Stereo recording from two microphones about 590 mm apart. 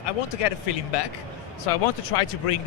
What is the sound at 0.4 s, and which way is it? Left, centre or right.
A man's voice, left.